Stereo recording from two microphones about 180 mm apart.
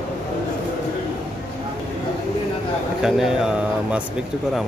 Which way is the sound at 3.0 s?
Centre (ahead or behind).